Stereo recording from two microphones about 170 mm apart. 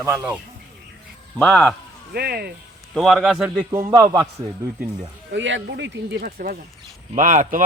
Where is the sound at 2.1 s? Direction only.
65° right (ahead or behind).